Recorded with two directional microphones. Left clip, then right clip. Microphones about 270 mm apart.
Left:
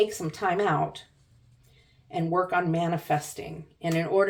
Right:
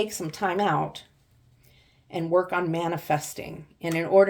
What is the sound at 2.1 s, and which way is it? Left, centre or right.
Speech, right.